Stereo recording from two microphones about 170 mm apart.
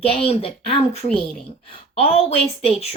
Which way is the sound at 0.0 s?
35° left (ahead or behind).